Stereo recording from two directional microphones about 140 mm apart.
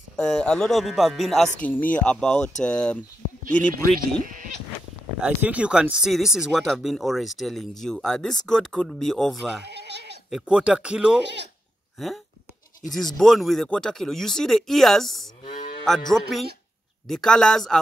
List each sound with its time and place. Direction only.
0.1 s speech: 5° left (ahead or behind)
3.9 s speech: 90° right
5.2 s speech: 10° right (ahead or behind)
12.9 s speech: centre (ahead or behind)